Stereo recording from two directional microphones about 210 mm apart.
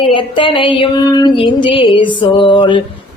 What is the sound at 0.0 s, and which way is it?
Music, 25° left (ahead or behind).